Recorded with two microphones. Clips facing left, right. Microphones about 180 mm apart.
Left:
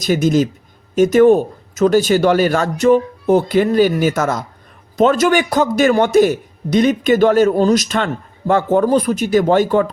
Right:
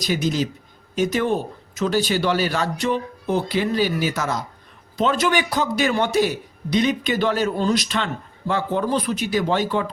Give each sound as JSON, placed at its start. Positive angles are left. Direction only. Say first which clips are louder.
{"t": 0.0, "sound": "a man's voice", "louder": "left 8 dB", "side_deg": 50}